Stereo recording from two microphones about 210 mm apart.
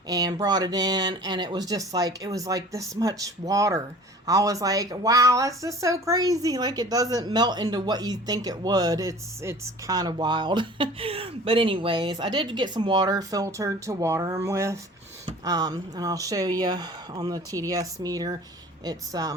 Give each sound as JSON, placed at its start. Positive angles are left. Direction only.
{"t": 0.1, "sound": "speech", "side_deg": -20}